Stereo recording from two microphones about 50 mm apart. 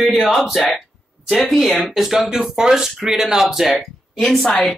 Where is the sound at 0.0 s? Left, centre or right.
Centre.